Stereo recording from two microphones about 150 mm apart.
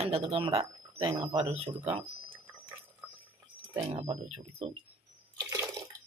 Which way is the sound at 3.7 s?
40° right (ahead or behind).